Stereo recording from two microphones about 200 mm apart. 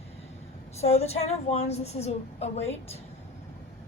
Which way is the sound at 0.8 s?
30° left (ahead or behind).